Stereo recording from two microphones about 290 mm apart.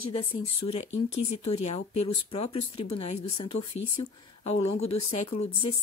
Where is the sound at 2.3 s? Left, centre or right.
Centre.